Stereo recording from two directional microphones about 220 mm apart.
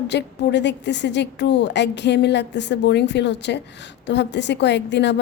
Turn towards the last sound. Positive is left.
turn(degrees=50)  # may be behind; listen again after turning